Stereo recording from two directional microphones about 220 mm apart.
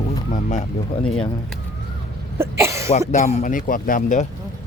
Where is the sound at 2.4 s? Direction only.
10° right (ahead or behind).